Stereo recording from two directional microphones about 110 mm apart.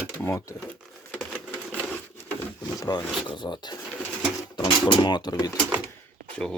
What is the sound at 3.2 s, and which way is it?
Speech, 45° left (ahead or behind).